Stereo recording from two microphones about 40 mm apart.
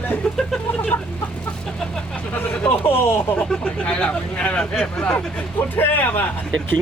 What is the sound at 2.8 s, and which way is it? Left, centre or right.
Speech, left.